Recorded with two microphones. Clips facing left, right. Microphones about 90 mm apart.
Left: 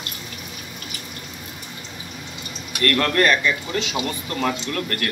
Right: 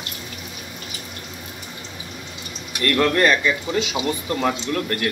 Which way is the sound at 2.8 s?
10° right (ahead or behind).